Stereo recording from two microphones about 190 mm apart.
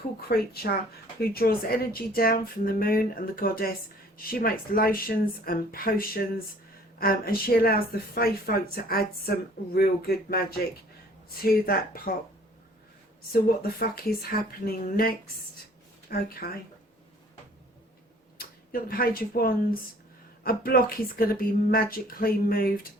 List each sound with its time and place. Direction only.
0.3 s speech: 55° left (ahead or behind)
11.4 s speech: 50° left (ahead or behind)
13.3 s speech: 50° left (ahead or behind)
18.3 s speech: 50° left (ahead or behind)